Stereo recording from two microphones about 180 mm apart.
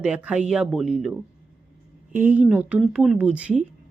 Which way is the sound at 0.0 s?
5° right (ahead or behind).